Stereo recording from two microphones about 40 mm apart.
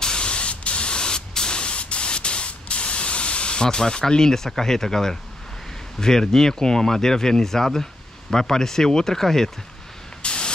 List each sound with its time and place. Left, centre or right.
0.0 s spray: left
3.6 s speech: centre
10.2 s spray: left